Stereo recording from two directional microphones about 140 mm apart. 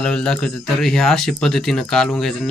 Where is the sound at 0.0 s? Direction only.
5° left (ahead or behind).